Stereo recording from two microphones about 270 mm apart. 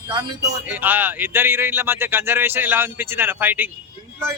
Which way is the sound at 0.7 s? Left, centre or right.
Centre.